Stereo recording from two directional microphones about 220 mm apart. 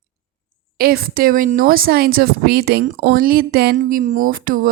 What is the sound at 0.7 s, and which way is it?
A woman's voice, 45° right (ahead or behind).